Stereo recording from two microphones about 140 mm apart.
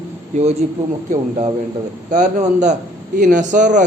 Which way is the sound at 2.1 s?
60° right (ahead or behind).